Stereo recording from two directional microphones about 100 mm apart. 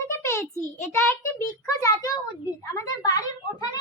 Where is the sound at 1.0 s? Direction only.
20° left (ahead or behind).